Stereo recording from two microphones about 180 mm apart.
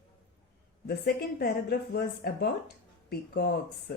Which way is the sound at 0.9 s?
60° left (ahead or behind).